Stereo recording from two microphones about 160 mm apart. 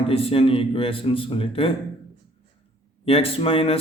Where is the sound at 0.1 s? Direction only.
35° left (ahead or behind).